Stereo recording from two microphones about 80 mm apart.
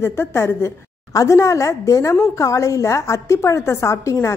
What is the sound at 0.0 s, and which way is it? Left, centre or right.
A woman's voice, left.